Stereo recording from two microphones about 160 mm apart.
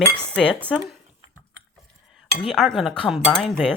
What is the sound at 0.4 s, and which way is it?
Speech, centre (ahead or behind).